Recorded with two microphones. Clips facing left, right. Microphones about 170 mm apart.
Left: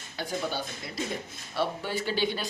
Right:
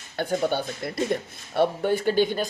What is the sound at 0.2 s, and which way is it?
Speech, 55° right (ahead or behind).